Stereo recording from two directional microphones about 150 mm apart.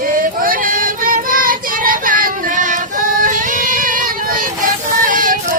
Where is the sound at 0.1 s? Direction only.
70° right (ahead or behind).